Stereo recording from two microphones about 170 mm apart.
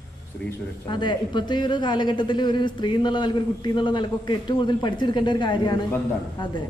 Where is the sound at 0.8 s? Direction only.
25° left (ahead or behind).